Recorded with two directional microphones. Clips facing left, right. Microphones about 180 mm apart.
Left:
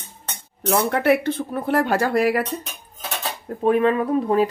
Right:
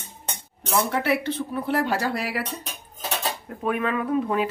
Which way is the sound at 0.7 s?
55° left (ahead or behind).